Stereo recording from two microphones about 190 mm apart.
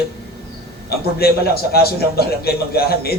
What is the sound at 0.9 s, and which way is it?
A man's voice, 55° left (ahead or behind).